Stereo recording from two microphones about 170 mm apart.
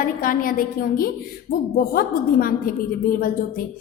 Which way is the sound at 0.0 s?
55° left (ahead or behind).